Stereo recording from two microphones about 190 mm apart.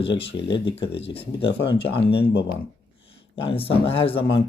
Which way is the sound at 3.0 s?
30° left (ahead or behind).